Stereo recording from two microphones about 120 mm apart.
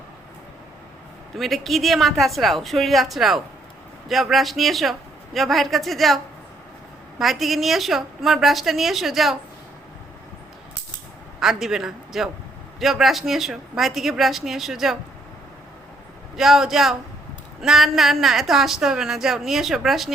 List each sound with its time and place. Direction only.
1.4 s a woman's voice: centre (ahead or behind)
7.2 s a woman's voice: centre (ahead or behind)
11.3 s a woman's voice: 5° right (ahead or behind)
16.4 s a woman's voice: centre (ahead or behind)